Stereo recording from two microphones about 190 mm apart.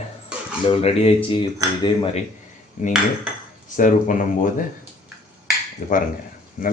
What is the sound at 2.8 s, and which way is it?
Speech, 45° left (ahead or behind).